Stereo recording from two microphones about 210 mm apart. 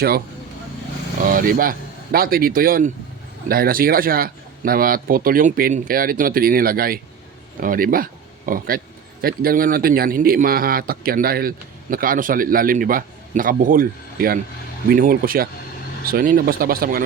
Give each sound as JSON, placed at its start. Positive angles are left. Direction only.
{"t": 1.2, "sound": "a man's voice", "side_deg": -40}